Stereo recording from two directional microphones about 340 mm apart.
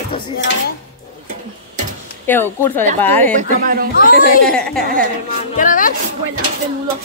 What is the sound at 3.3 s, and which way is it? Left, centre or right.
Speech, right.